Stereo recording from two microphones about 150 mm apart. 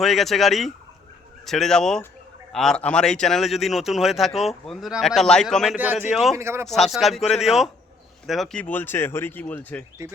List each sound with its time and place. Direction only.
0.0 s a man's voice: centre (ahead or behind)
5.7 s speech: 10° right (ahead or behind)
6.7 s a man's voice: centre (ahead or behind)